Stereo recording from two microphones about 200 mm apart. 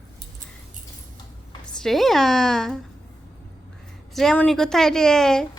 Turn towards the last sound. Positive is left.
turn(degrees=5)  # may be behind; listen again after turning